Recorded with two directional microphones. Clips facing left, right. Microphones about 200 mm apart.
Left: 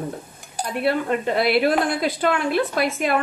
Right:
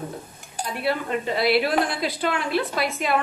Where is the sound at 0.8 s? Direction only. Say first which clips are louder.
Left 4 dB; 55° left (ahead or behind).